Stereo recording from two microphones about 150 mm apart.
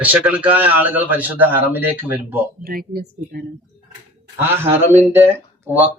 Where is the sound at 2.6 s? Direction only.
85° right.